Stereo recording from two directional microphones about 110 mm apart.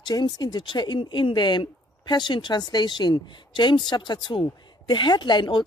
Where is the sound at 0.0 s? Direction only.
40° left (ahead or behind).